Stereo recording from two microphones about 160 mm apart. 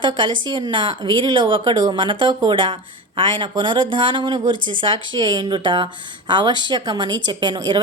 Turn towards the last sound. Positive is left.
turn(degrees=-25)  # may be behind; listen again after turning